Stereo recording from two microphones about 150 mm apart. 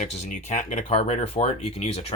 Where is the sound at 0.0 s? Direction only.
50° left (ahead or behind).